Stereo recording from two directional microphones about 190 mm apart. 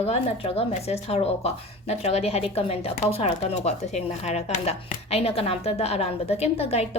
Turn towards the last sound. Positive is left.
turn(degrees=30)  # may be behind; listen again after turning